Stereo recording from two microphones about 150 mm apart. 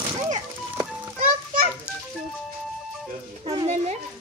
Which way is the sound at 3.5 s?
40° right (ahead or behind).